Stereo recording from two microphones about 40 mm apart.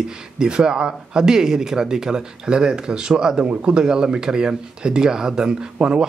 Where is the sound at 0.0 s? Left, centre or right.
Centre.